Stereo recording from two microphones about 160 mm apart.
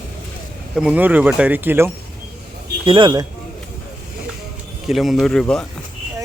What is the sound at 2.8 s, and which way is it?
Speech, 30° right (ahead or behind).